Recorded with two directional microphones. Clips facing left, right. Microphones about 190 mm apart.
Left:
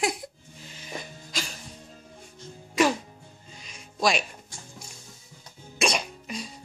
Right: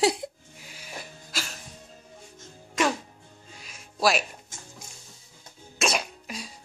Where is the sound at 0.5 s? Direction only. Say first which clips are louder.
Left 7 dB; 10° right (ahead or behind).